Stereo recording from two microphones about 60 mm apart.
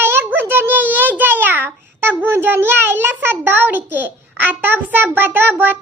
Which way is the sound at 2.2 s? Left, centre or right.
Right.